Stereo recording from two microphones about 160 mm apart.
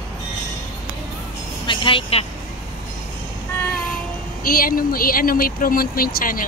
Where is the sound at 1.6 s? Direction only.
35° left (ahead or behind).